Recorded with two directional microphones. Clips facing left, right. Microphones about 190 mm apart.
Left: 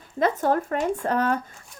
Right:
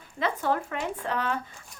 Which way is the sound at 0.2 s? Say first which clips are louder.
Left 5 dB; 45° left (ahead or behind).